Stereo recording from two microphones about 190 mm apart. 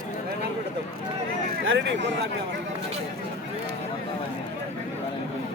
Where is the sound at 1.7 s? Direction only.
65° right (ahead or behind).